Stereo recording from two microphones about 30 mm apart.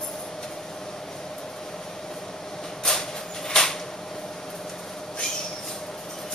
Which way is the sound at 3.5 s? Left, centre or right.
Centre.